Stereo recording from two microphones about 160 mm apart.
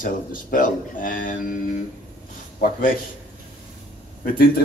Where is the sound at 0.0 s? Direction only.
60° left (ahead or behind).